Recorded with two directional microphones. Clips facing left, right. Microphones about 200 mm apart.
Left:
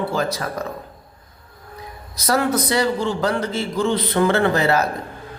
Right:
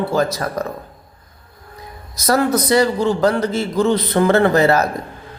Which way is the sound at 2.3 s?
40° right (ahead or behind).